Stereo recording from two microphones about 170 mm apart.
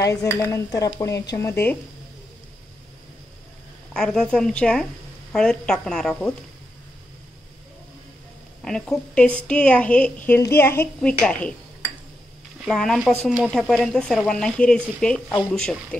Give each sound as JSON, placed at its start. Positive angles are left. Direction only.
{"t": 0.0, "sound": "a woman's voice", "side_deg": 20}
{"t": 3.9, "sound": "speech", "side_deg": 5}
{"t": 8.6, "sound": "a woman's voice", "side_deg": 5}
{"t": 12.6, "sound": "speech", "side_deg": 0}